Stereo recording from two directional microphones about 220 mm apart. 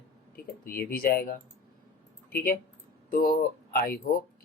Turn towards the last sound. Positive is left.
turn(degrees=45)  # may be behind; listen again after turning